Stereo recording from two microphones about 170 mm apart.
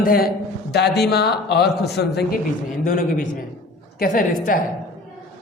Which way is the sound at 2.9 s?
55° left (ahead or behind).